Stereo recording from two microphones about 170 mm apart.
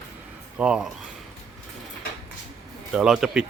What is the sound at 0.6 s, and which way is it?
Speech, 5° right (ahead or behind).